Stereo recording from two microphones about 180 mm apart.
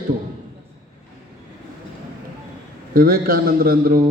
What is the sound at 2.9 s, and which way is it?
A man's voice, 55° right (ahead or behind).